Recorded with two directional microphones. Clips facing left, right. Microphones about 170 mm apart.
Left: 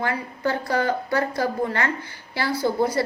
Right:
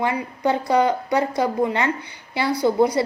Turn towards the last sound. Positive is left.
turn(degrees=-20)  # may be behind; listen again after turning